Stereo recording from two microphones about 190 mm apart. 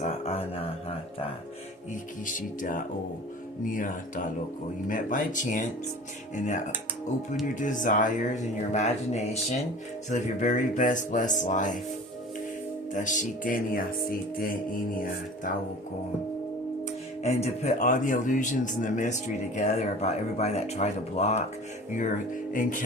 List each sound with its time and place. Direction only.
0.0 s speech: 30° left (ahead or behind)
2.2 s music: 45° left (ahead or behind)
6.3 s speech: 40° left (ahead or behind)
7.6 s speech: 45° left (ahead or behind)
12.9 s music: 40° left (ahead or behind)
17.2 s speech: 35° left (ahead or behind)